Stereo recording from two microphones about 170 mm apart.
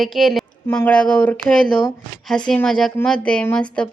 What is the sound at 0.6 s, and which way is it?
A woman's voice, 10° left (ahead or behind).